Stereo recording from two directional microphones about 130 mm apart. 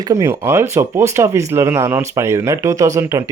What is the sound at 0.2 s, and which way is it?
Speech, 20° right (ahead or behind).